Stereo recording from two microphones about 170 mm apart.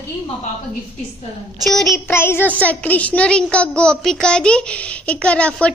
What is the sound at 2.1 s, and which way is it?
A woman's voice, 15° left (ahead or behind).